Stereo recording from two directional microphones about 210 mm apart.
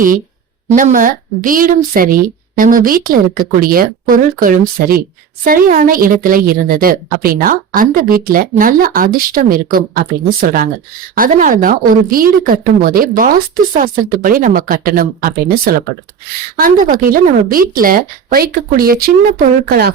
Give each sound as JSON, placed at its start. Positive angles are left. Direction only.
{"t": 0.8, "sound": "a woman's voice", "side_deg": -40}